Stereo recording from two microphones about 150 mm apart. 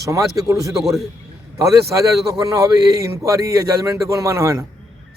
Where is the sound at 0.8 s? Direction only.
Centre (ahead or behind).